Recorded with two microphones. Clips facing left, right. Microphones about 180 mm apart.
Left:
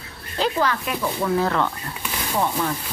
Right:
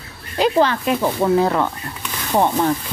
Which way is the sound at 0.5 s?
30° right (ahead or behind).